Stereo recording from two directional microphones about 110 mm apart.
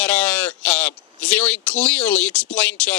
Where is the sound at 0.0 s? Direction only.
10° left (ahead or behind).